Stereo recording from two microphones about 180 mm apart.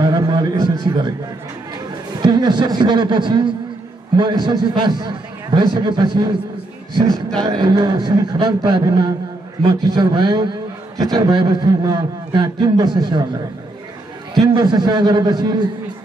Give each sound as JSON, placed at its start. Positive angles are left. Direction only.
{"t": 0.0, "sound": "a sound", "side_deg": -25}
{"t": 2.2, "sound": "a man's voice", "side_deg": -25}
{"t": 7.4, "sound": "a man's voice", "side_deg": -25}
{"t": 14.4, "sound": "a man's voice", "side_deg": -25}